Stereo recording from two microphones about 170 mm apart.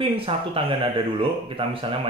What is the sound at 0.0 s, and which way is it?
Speech, 35° right (ahead or behind).